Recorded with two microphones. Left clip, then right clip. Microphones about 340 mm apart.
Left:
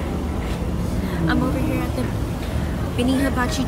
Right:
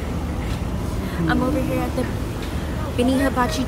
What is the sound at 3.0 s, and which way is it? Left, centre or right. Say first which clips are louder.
Speech: right 2 dB; centre.